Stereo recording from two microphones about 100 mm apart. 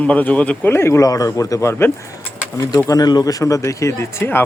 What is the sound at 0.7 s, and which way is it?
Speech, 25° left (ahead or behind).